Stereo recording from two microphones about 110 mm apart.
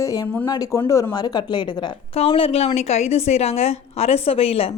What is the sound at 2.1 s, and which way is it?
Speech, 60° left (ahead or behind).